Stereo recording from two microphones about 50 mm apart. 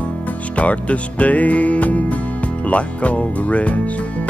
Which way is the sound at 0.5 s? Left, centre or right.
Left.